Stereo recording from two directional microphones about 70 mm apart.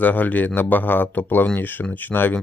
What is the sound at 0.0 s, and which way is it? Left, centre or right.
Speech, left.